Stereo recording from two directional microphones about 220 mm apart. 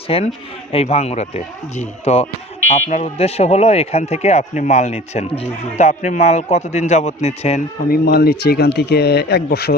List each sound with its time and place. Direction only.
0.1 s a man's voice: 25° left (ahead or behind)
7.9 s speech: 45° left (ahead or behind)